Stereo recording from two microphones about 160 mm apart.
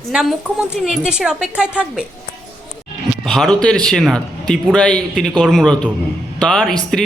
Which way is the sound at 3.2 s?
Centre (ahead or behind).